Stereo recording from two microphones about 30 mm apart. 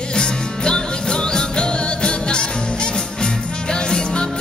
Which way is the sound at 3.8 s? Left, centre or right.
Left.